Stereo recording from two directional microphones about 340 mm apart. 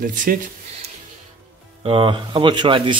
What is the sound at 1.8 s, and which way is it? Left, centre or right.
Speech, centre.